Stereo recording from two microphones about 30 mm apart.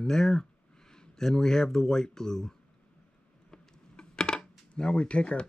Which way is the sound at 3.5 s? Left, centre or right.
Left.